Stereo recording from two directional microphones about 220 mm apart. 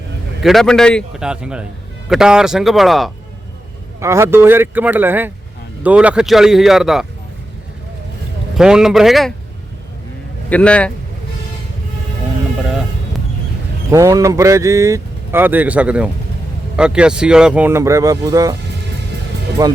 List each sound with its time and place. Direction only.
0.4 s speech: centre (ahead or behind)
4.0 s speech: 10° right (ahead or behind)
8.5 s speech: 5° right (ahead or behind)
10.5 s speech: 5° left (ahead or behind)
13.9 s speech: 15° right (ahead or behind)
19.6 s speech: 15° right (ahead or behind)